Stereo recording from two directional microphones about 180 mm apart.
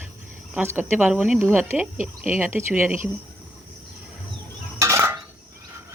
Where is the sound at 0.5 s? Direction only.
10° right (ahead or behind).